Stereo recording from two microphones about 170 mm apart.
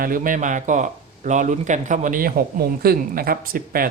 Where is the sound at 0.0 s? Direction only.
55° right (ahead or behind).